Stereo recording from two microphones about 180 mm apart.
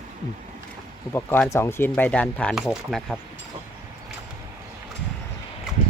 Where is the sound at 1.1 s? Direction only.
10° left (ahead or behind).